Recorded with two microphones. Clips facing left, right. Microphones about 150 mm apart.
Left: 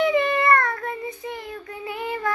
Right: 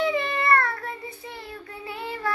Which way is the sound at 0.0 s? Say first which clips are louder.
Left 5 dB; 15° left (ahead or behind).